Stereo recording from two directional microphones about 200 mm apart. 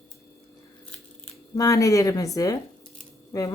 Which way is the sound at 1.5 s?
15° left (ahead or behind).